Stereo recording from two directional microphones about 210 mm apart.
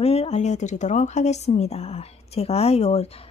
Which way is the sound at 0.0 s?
30° left (ahead or behind).